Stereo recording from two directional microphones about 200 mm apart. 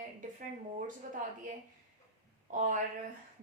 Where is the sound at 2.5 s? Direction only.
40° right (ahead or behind).